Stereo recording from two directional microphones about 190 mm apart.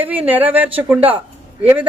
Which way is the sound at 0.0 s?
10° right (ahead or behind).